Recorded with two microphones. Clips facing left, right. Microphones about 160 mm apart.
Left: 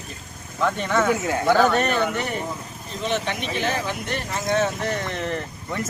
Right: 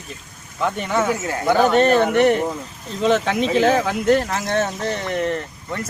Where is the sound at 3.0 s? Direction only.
90° right.